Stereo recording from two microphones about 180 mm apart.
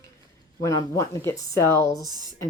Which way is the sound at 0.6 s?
20° left (ahead or behind).